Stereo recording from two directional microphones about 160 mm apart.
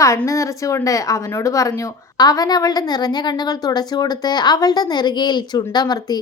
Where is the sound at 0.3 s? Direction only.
20° left (ahead or behind).